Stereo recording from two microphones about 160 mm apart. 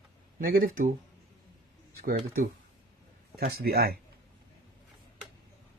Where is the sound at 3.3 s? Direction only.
75° right (ahead or behind).